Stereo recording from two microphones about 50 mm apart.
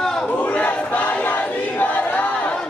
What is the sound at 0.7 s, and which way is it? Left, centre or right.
Choir, left.